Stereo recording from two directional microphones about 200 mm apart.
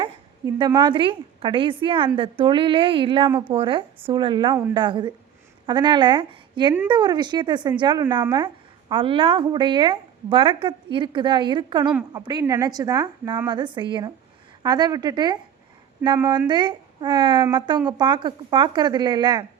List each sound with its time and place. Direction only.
0.0 s a woman's voice: 20° right (ahead or behind)